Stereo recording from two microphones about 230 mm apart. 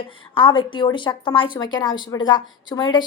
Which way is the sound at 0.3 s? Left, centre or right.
Left.